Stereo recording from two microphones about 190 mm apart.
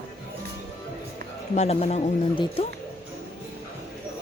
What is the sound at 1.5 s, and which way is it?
Speech, 35° left (ahead or behind).